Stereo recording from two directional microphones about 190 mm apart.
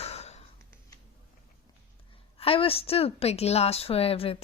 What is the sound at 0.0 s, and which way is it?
Gasp, 35° left (ahead or behind).